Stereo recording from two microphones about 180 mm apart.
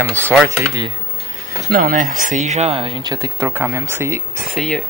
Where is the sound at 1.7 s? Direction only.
55° right (ahead or behind); by 3.1 s 30° right (ahead or behind).